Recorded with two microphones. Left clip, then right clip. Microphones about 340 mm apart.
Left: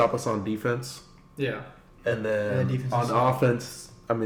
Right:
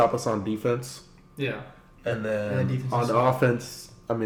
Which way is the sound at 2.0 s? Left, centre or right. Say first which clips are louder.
Left 2 dB; centre.